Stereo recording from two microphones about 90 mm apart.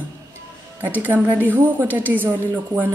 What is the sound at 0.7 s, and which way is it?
A woman's voice, 20° right (ahead or behind).